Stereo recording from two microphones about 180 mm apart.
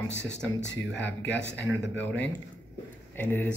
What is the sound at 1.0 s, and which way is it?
Speech, 75° left (ahead or behind).